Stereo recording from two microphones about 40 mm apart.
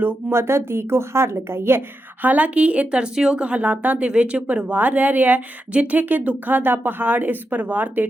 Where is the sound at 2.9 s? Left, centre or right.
Right.